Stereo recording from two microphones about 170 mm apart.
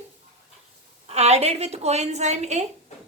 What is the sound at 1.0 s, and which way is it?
A woman's voice, 40° right (ahead or behind).